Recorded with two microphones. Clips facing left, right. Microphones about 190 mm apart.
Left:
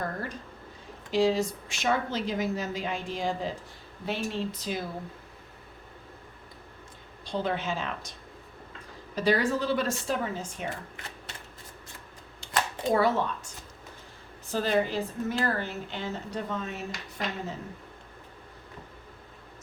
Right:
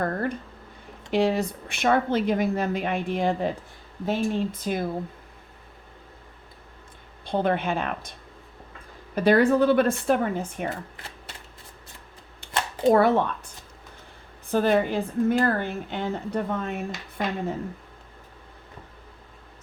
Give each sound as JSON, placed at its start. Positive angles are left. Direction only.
{"t": 0.0, "sound": "a woman's voice", "side_deg": -60}
{"t": 7.3, "sound": "a woman's voice", "side_deg": -55}
{"t": 9.1, "sound": "a woman's voice", "side_deg": -55}
{"t": 12.9, "sound": "a woman's voice", "side_deg": -55}